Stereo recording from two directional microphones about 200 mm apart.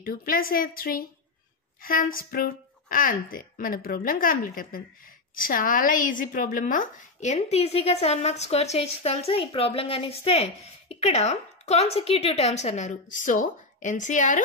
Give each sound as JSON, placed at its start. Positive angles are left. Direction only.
{"t": 0.0, "sound": "a woman's voice", "side_deg": 45}